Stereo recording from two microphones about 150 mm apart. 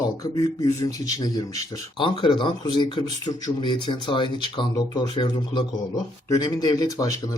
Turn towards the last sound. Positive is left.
turn(degrees=25)  # may be behind; listen again after turning